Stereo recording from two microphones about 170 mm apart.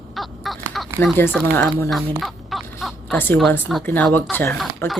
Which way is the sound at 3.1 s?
10° left (ahead or behind).